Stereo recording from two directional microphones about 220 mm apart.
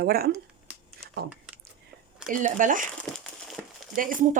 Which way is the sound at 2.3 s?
35° right (ahead or behind).